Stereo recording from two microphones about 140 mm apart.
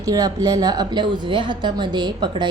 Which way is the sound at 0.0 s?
25° right (ahead or behind).